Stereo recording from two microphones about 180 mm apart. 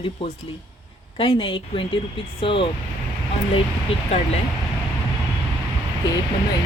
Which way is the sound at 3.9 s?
35° left (ahead or behind).